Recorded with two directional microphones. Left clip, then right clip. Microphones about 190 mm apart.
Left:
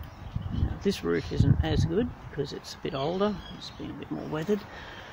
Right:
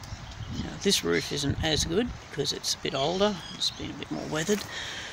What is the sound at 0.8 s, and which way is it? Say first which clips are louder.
Speech: right 3 dB; centre (ahead or behind).